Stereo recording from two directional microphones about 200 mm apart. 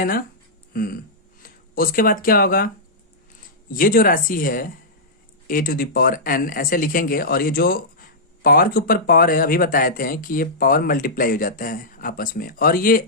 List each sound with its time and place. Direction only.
0.7 s a sound: 45° left (ahead or behind)
1.4 s speech: 45° left (ahead or behind)
3.7 s speech: 45° left (ahead or behind)